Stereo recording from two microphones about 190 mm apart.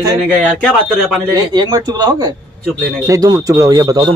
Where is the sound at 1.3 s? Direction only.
20° right (ahead or behind).